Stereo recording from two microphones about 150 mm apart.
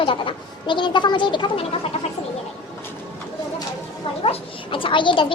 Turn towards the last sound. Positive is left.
turn(degrees=35)  # may be behind; listen again after turning